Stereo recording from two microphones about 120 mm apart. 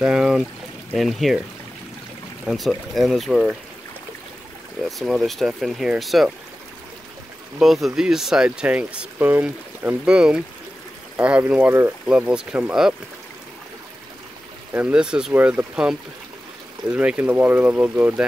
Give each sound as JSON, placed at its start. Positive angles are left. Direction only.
{"t": 0.0, "sound": "speech", "side_deg": -10}
{"t": 2.4, "sound": "speech", "side_deg": 0}
{"t": 4.8, "sound": "speech", "side_deg": 0}
{"t": 7.5, "sound": "speech", "side_deg": 0}
{"t": 14.7, "sound": "speech", "side_deg": -10}